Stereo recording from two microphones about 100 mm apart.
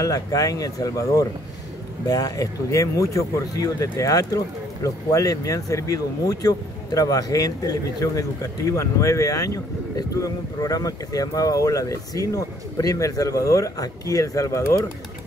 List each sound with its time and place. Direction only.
0.0 s speech: 35° left (ahead or behind)